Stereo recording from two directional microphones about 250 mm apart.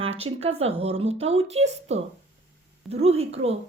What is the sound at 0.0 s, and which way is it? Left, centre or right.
Speech, right.